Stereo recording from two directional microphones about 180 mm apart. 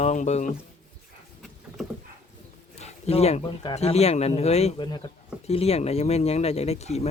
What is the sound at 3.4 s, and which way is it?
Speech, 25° left (ahead or behind).